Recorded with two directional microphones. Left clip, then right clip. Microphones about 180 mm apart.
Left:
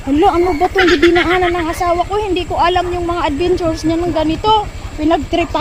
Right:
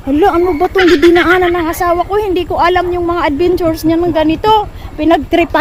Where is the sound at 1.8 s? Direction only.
40° right (ahead or behind).